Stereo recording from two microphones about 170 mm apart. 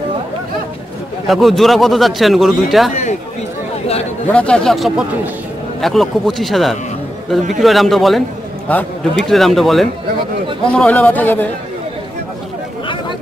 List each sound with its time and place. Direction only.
1.2 s a man's voice: centre (ahead or behind)
2.9 s speech: 45° left (ahead or behind)
4.3 s a man's voice: 5° left (ahead or behind)